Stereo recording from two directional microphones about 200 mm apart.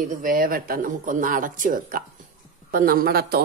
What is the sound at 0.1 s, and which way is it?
Speech, 45° right (ahead or behind).